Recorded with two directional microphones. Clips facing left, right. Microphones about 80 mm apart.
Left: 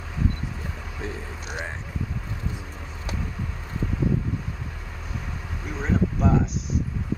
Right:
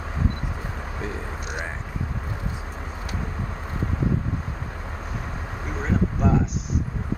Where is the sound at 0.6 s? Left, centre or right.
Right.